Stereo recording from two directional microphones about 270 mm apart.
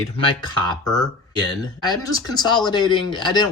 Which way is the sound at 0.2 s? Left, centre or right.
Centre.